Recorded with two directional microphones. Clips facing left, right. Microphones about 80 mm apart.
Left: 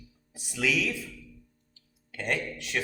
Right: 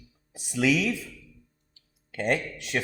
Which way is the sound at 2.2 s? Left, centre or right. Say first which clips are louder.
Right 4 dB; right.